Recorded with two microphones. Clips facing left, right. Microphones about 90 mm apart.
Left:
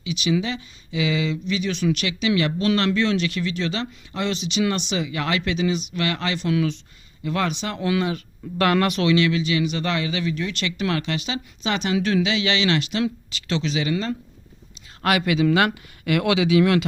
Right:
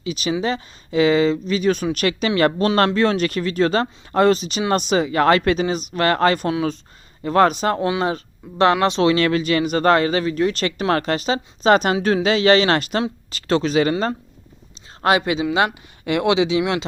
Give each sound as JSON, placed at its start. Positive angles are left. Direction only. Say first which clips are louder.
{"t": 0.0, "sound": "speech", "louder": "right 1 dB", "side_deg": -40}
{"t": 6.5, "sound": "speech", "louder": "right 1 dB", "side_deg": -30}
{"t": 7.9, "sound": "speech", "louder": "right 2 dB", "side_deg": -30}
{"t": 9.1, "sound": "speech", "louder": "right 2 dB", "side_deg": -45}
{"t": 15.0, "sound": "speech", "louder": "right 2 dB", "side_deg": -25}